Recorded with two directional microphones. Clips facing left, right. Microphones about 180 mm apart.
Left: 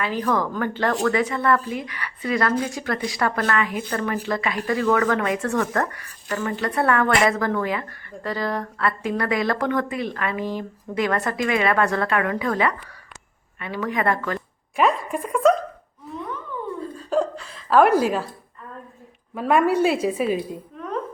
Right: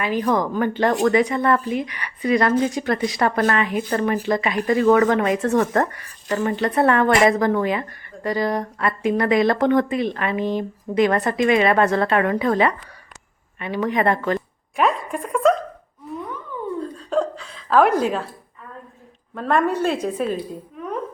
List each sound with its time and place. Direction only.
0.0 s speech: 15° right (ahead or behind)
14.8 s a woman's voice: centre (ahead or behind)
16.8 s chuckle: 5° left (ahead or behind)
19.3 s a woman's voice: 5° left (ahead or behind)